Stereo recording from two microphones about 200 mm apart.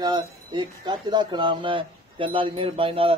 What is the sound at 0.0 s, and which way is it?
Speech, 20° right (ahead or behind).